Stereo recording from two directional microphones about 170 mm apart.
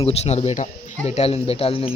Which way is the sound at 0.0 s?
35° left (ahead or behind).